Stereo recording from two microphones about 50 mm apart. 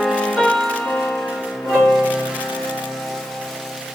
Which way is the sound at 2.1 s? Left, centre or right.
Right.